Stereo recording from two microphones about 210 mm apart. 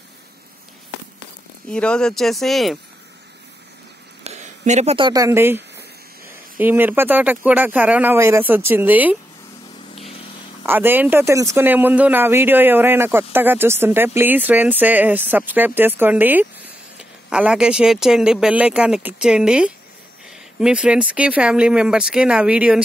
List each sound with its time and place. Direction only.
1.7 s speech: 5° left (ahead or behind)
4.2 s speech: 35° right (ahead or behind); by 5.6 s 10° right (ahead or behind)
6.6 s a man's voice: 10° right (ahead or behind)
10.6 s a man's voice: 10° right (ahead or behind)